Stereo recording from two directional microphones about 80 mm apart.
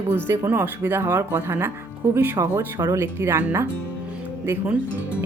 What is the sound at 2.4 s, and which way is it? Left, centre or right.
Speech, right.